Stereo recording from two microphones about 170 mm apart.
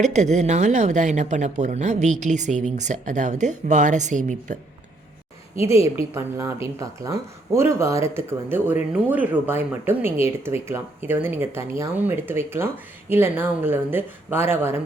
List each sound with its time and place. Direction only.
0.0 s a woman's voice: 45° right (ahead or behind)
5.5 s speech: 15° right (ahead or behind)